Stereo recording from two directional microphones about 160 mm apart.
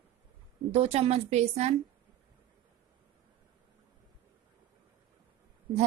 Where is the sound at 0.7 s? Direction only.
40° right (ahead or behind).